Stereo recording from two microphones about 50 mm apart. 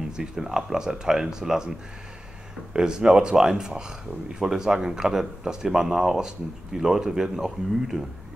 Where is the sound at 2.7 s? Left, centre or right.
Centre.